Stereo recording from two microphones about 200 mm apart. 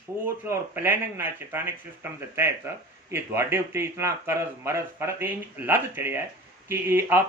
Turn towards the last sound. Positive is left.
turn(degrees=-10)  # may be behind; listen again after turning